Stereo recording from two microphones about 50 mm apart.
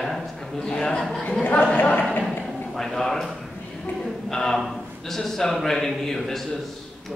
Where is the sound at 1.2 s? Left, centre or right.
Left.